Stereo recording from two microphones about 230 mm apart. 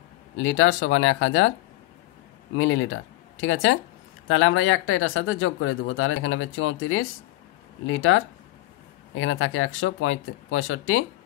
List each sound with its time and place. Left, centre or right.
0.4 s speech: left
2.5 s speech: left